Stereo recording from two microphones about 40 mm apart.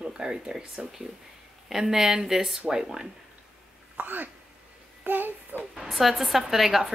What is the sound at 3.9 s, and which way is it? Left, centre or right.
A child's voice, right.